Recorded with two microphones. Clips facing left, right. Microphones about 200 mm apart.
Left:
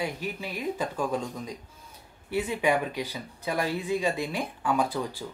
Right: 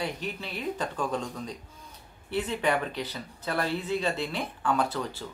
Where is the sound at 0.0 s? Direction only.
10° left (ahead or behind).